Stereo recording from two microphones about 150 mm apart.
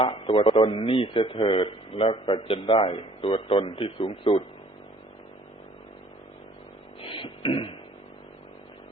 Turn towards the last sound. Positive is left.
turn(degrees=35)  # may be behind; listen again after turning